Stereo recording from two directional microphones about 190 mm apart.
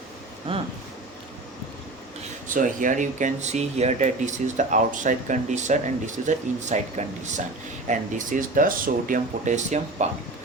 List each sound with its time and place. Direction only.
2.5 s speech: 45° right (ahead or behind)